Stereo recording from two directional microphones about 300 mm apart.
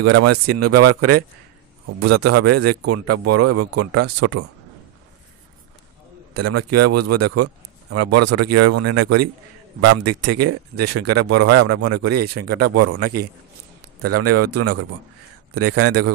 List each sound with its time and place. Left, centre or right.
0.0 s speech: right
6.3 s speech: right